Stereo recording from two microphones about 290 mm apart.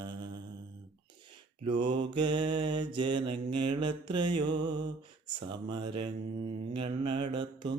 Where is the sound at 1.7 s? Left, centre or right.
Centre.